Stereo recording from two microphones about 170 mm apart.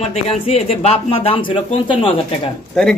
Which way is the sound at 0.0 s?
35° left (ahead or behind).